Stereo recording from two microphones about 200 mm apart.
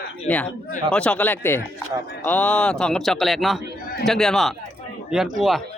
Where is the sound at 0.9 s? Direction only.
5° left (ahead or behind).